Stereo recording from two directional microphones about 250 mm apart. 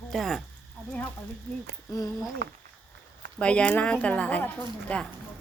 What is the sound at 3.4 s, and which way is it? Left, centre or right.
A woman's voice, centre.